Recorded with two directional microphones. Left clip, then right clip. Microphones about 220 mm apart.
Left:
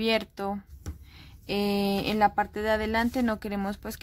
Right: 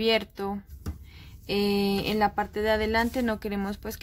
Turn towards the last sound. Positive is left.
turn(degrees=15)  # may be behind; listen again after turning